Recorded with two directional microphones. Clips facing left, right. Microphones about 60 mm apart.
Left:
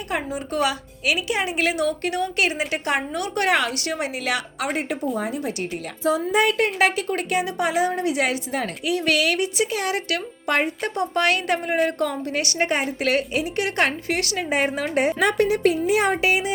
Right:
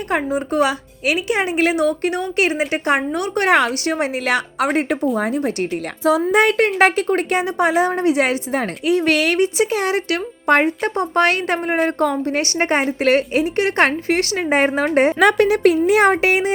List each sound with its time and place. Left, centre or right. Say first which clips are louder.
0.1 s a woman's voice: right 7 dB; right
5.1 s a woman's voice: right 6 dB; right
6.1 s a woman's voice: right 5 dB; right
15.2 s a woman's voice: right 5 dB; right